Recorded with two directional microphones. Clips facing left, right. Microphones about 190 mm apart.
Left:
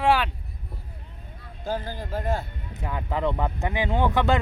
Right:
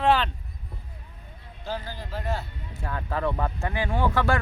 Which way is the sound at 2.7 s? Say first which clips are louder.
Left 1 dB; 15° left (ahead or behind).